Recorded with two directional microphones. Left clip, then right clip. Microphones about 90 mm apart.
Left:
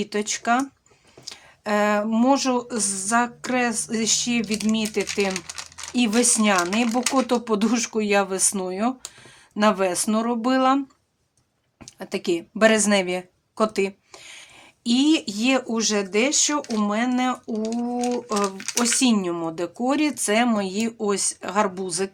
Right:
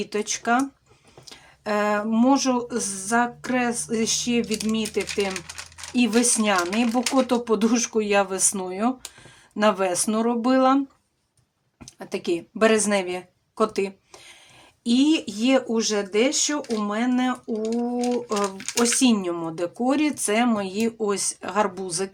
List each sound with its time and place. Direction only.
0.0 s speech: 45° left (ahead or behind)
9.0 s a sound: 25° left (ahead or behind)
9.6 s speech: 35° left (ahead or behind)
11.9 s a woman's voice: 50° left (ahead or behind)